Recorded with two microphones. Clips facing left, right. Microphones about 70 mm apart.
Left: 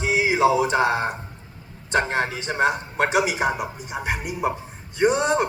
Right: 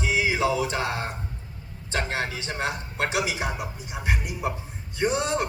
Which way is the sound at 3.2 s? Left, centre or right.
Left.